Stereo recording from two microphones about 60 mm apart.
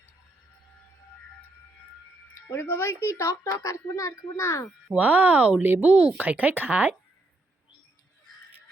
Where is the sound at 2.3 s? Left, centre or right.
Left.